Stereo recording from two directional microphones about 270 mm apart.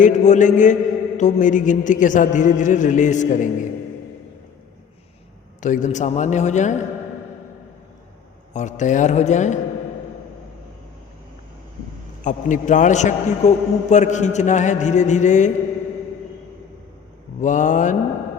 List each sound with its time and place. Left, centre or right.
0.0 s a man's voice: left
5.5 s a man's voice: left
8.5 s a man's voice: left
12.2 s a man's voice: left
17.4 s a man's voice: left